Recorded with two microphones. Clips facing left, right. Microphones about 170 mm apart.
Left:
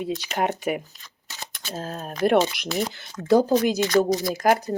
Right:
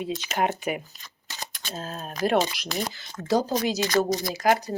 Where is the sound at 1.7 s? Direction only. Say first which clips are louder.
Left 3 dB; 50° left (ahead or behind).